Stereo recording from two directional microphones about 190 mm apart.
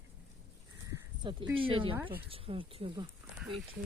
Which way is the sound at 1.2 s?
25° right (ahead or behind).